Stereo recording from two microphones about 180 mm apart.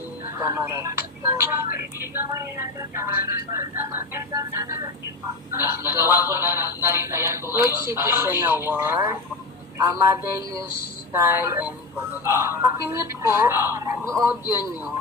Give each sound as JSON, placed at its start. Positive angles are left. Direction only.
{"t": 0.3, "sound": "a woman's voice", "side_deg": -15}
{"t": 11.1, "sound": "a woman's voice", "side_deg": -15}